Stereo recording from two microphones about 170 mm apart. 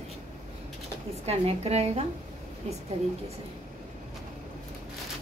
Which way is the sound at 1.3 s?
40° right (ahead or behind).